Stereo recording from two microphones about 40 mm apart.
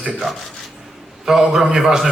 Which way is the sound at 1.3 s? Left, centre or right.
Centre.